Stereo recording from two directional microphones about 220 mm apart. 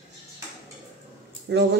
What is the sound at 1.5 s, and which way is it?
Speech, 50° right (ahead or behind).